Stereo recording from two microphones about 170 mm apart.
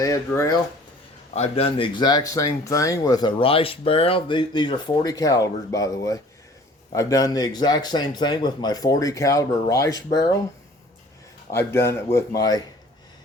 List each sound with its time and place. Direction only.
0.0 s speech: 20° left (ahead or behind)
1.4 s speech: 35° left (ahead or behind); by 10.2 s 20° left (ahead or behind)
11.5 s a man's voice: 15° left (ahead or behind)